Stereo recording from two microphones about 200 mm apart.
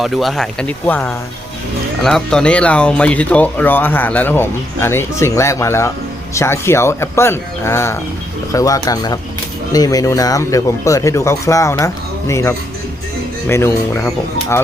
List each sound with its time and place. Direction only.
0.0 s speech: centre (ahead or behind)